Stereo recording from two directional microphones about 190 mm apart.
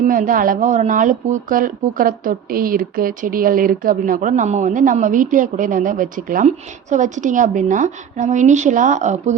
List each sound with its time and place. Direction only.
0.0 s a woman's voice: 45° right (ahead or behind)